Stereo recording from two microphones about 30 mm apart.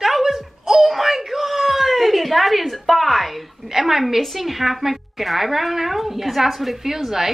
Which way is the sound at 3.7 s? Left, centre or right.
Centre.